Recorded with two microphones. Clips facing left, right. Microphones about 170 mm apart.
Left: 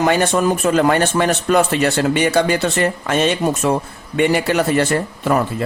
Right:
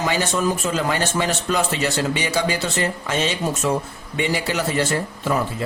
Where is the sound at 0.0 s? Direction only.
60° left (ahead or behind).